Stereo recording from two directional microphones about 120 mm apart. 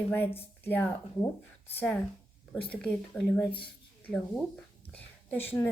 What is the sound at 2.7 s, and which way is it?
A woman's voice, 10° left (ahead or behind).